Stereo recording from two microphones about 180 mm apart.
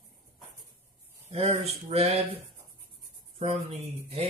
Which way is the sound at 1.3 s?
35° right (ahead or behind).